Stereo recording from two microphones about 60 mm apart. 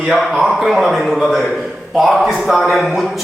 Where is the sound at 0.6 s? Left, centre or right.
Centre.